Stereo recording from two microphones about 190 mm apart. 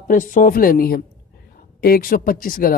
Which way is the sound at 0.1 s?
45° left (ahead or behind).